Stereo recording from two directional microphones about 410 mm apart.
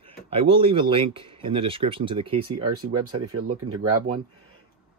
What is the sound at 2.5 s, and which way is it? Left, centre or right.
Speech, right.